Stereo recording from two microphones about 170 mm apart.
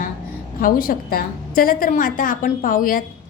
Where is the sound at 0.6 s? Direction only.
60° left (ahead or behind).